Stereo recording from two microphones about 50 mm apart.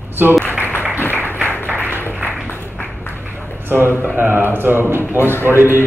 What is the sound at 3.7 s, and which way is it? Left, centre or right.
A man's voice, right.